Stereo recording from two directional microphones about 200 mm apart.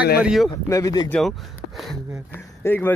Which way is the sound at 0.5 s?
20° left (ahead or behind).